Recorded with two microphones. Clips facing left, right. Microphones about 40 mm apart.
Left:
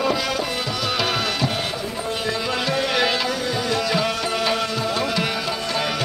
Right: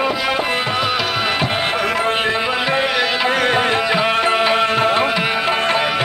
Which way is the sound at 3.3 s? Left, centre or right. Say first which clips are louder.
Right 8 dB; right.